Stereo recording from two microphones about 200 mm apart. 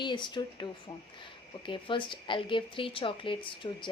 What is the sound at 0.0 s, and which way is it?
Speech, 20° left (ahead or behind).